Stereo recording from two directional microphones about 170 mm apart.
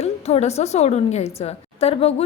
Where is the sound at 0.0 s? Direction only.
40° left (ahead or behind).